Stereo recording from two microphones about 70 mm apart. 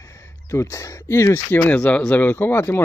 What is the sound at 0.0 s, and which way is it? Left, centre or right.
Speech, left.